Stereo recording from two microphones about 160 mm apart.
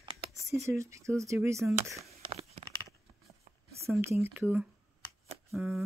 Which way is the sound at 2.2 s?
35° right (ahead or behind).